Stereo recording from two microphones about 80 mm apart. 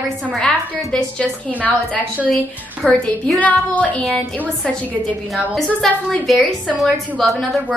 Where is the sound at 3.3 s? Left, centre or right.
Centre.